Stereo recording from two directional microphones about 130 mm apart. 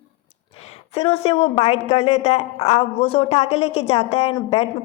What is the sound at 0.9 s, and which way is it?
A woman's voice, 50° left (ahead or behind).